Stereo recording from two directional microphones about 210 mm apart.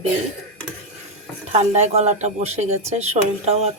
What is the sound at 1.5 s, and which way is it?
Speech, 30° right (ahead or behind).